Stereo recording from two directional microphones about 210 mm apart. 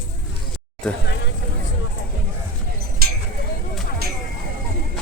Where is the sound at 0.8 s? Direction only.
5° left (ahead or behind).